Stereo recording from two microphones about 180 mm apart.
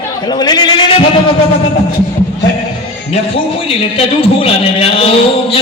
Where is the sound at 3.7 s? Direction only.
30° left (ahead or behind).